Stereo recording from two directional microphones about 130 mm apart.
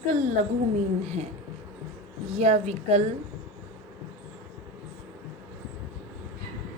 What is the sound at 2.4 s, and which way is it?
Speech, 55° right (ahead or behind).